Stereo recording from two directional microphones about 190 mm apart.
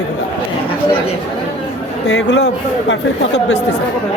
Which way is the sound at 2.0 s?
70° left (ahead or behind).